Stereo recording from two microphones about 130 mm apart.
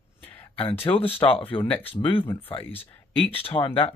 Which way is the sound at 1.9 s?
40° left (ahead or behind).